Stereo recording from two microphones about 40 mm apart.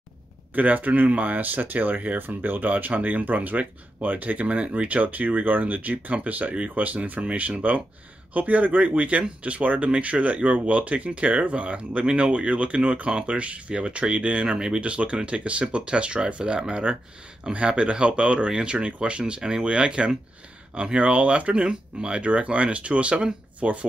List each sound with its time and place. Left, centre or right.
0.6 s speech: right
2.1 s speech: right
2.7 s speech: right